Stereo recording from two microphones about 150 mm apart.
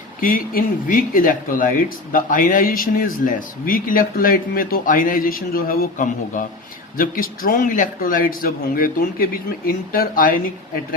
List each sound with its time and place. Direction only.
0.2 s speech: 70° left (ahead or behind)